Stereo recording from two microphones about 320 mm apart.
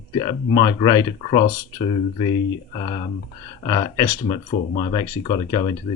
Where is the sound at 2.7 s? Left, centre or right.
Centre.